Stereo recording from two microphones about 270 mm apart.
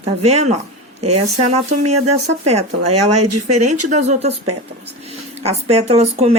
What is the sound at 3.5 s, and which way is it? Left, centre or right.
Speech, right.